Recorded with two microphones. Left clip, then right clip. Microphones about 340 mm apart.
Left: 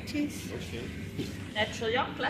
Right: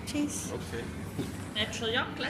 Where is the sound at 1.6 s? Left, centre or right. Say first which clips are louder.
Left 1 dB; centre.